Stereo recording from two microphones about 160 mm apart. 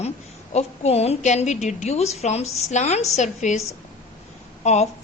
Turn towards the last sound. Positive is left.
turn(degrees=45)  # may be behind; listen again after turning